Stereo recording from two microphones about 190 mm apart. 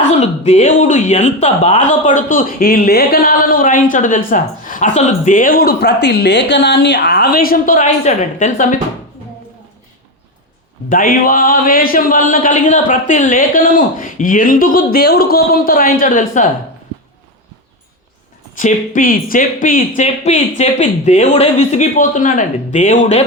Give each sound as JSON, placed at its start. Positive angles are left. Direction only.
{"t": 0.1, "sound": "speech", "side_deg": 35}
{"t": 10.8, "sound": "speech", "side_deg": 45}
{"t": 18.5, "sound": "speech", "side_deg": 45}